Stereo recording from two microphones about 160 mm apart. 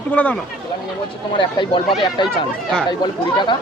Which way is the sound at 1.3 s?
30° left (ahead or behind).